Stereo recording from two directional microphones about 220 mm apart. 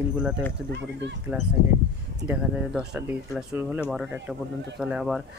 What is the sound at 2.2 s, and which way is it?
Speech, 5° right (ahead or behind).